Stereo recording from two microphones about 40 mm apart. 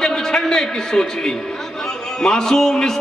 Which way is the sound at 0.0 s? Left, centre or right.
Centre.